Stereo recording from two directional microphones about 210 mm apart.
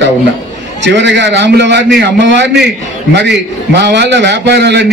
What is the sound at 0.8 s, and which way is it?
A man's voice, 55° right (ahead or behind).